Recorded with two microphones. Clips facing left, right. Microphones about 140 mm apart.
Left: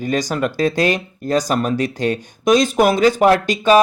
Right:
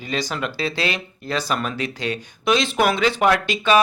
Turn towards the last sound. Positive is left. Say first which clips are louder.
# left 5 dB
turn(degrees=40)  # may be behind; listen again after turning